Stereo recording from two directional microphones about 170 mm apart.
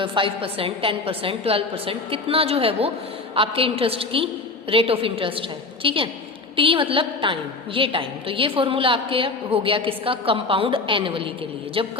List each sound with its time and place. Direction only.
0.0 s a woman's voice: 30° right (ahead or behind)